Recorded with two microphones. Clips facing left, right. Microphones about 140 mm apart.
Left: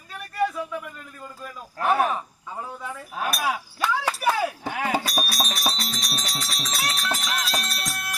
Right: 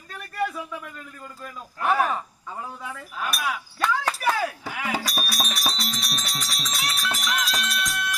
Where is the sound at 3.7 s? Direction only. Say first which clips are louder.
Even; 5° left (ahead or behind).